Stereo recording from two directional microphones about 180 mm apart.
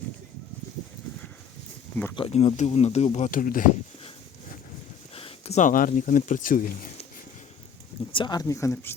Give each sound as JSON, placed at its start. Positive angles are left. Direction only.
{"t": 2.1, "sound": "speech", "side_deg": 35}
{"t": 5.1, "sound": "speech", "side_deg": 35}
{"t": 8.1, "sound": "speech", "side_deg": 25}